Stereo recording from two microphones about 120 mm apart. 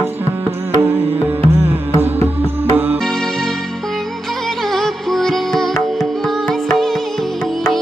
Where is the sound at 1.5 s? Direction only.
20° right (ahead or behind).